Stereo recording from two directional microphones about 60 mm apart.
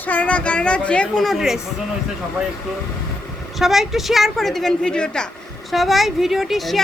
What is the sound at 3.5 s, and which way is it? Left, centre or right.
A woman's voice, centre.